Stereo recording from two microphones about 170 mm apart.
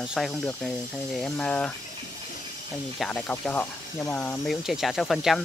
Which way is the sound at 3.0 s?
10° left (ahead or behind).